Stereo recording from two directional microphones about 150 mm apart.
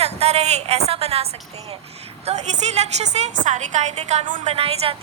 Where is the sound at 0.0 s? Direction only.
45° right (ahead or behind).